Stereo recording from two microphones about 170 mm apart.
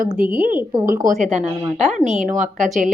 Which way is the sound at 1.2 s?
40° right (ahead or behind).